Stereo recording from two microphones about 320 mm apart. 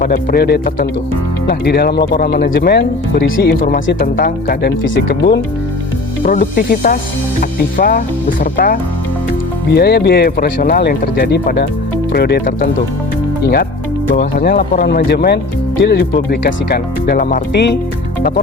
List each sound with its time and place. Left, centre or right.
0.0 s speech: left
14.1 s speech: left